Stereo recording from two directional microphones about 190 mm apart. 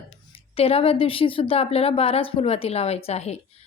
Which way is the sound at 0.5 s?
30° left (ahead or behind).